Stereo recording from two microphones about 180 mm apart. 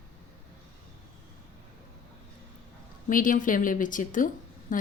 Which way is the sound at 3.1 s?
50° left (ahead or behind).